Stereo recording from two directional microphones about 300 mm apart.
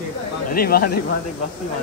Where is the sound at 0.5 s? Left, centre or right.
Left.